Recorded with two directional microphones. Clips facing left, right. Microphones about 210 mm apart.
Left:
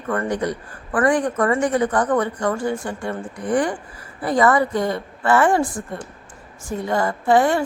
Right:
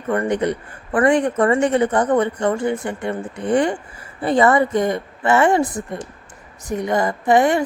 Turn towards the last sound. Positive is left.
turn(degrees=-20)  # may be behind; listen again after turning